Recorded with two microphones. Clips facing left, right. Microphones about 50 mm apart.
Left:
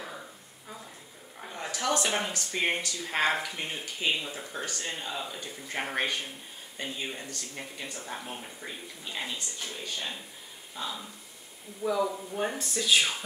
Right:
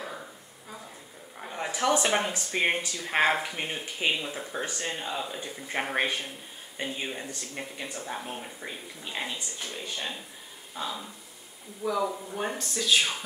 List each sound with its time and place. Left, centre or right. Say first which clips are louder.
1.4 s speech: right 4 dB; centre
12.5 s speech: right 1 dB; centre